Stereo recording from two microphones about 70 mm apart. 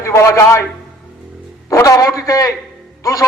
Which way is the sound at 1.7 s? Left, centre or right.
Left.